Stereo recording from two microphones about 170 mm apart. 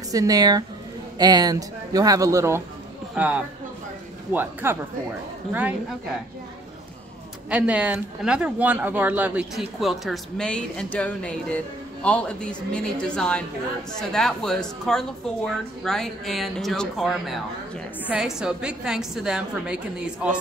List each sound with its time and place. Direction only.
0.1 s a man's voice: 20° right (ahead or behind)
7.4 s speech: 10° right (ahead or behind)